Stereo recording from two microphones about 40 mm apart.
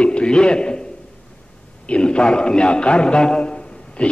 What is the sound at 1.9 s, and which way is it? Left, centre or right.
A man's voice, left.